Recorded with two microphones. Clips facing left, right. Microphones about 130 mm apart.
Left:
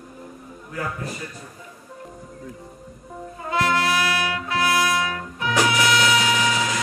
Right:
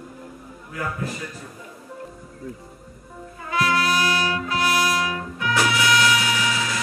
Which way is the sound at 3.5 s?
25° left (ahead or behind).